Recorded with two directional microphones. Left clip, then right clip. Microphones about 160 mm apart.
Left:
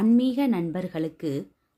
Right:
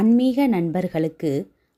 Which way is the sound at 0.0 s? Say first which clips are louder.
Right 4 dB; 30° right (ahead or behind).